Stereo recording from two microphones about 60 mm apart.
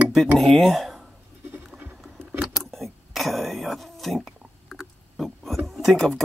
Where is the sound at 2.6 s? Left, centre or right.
Centre.